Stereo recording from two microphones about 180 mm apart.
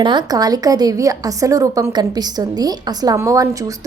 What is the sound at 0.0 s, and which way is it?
A woman's voice, 25° right (ahead or behind).